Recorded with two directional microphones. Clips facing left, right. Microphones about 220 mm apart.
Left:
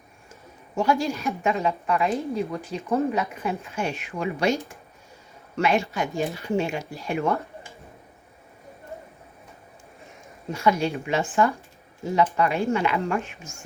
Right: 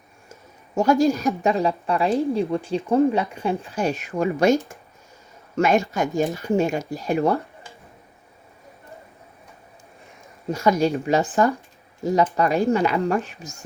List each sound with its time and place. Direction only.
0.8 s speech: 45° right (ahead or behind)
10.5 s speech: 40° right (ahead or behind)